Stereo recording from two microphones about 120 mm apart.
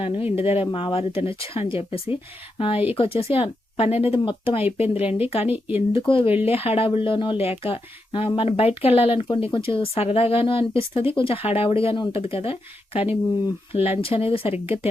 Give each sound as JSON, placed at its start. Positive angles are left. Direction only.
{"t": 0.0, "sound": "speech", "side_deg": 55}
{"t": 5.5, "sound": "speech", "side_deg": -15}
{"t": 5.9, "sound": "speech", "side_deg": 45}